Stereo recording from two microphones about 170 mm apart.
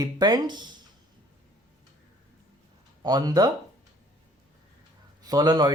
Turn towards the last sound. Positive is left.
turn(degrees=-25)  # may be behind; listen again after turning